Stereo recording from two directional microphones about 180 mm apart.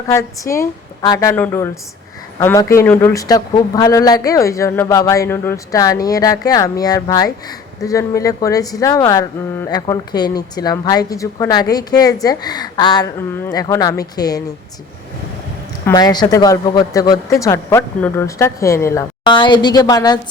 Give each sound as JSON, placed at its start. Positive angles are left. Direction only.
{"t": 0.1, "sound": "a woman's voice", "side_deg": 15}
{"t": 15.9, "sound": "speech", "side_deg": 20}
{"t": 19.2, "sound": "a woman's voice", "side_deg": 25}